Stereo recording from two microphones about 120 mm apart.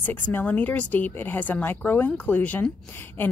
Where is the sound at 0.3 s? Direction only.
15° left (ahead or behind).